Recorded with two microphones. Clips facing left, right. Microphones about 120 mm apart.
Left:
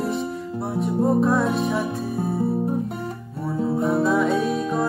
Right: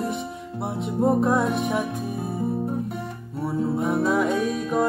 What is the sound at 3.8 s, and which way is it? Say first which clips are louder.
Music: left 3 dB; 10° right (ahead or behind).